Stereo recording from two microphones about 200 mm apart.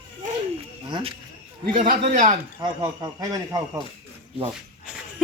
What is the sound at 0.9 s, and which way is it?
Speech, 25° right (ahead or behind).